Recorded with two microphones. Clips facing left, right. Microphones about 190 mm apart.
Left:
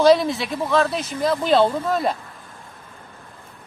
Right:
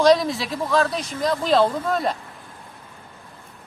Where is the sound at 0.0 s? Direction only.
5° left (ahead or behind).